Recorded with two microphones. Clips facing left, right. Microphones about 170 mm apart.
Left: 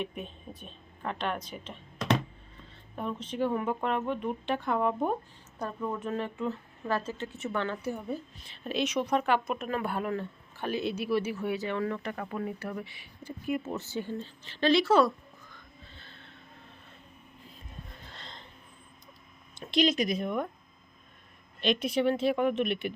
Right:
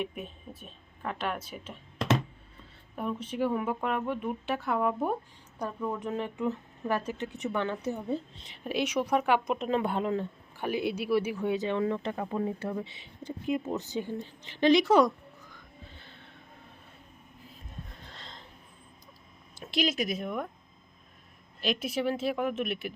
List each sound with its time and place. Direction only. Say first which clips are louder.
0.0 s speech: right 1 dB; 5° right (ahead or behind)
18.0 s a sound: even; centre (ahead or behind)
19.5 s speech: left 3 dB; 5° right (ahead or behind)
21.6 s speech: left 3 dB; 5° right (ahead or behind)